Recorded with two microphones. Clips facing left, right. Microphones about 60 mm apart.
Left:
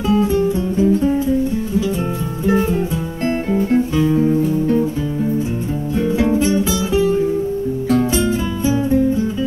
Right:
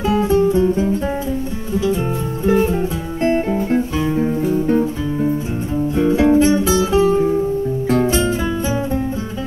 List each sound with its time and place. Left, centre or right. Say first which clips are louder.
0.0 s music: right 1 dB; right
3.3 s music: even; right
5.9 s music: right 3 dB; right